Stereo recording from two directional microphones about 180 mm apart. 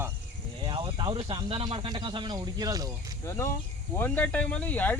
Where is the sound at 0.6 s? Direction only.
25° right (ahead or behind).